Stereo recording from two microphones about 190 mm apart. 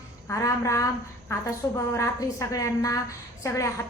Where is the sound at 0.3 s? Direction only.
15° left (ahead or behind).